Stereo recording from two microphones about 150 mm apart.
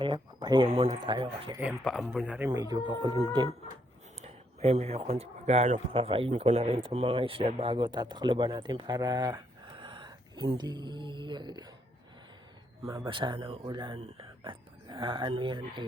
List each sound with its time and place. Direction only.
0.0 s speech: 30° right (ahead or behind)
1.8 s a man's voice: centre (ahead or behind)
2.5 s speech: 25° right (ahead or behind)
12.8 s speech: 20° right (ahead or behind)